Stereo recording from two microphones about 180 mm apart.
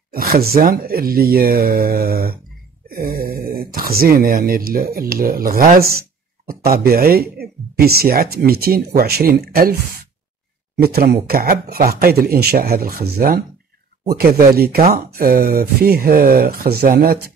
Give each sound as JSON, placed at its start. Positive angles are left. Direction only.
{"t": 0.1, "sound": "speech", "side_deg": -55}